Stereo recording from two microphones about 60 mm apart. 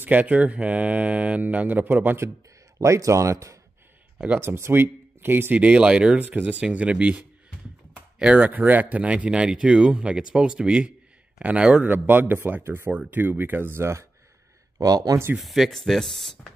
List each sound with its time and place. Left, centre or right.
0.0 s speech: right
2.8 s speech: right
4.4 s speech: right
5.6 s speech: centre
8.4 s speech: right
14.8 s speech: right
15.3 s speech: centre